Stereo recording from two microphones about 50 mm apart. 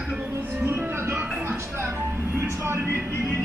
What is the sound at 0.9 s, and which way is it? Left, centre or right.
Music, right.